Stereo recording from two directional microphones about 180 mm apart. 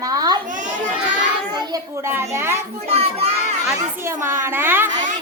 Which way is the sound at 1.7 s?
15° right (ahead or behind).